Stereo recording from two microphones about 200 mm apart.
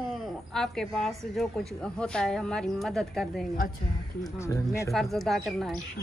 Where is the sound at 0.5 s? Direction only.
Centre (ahead or behind).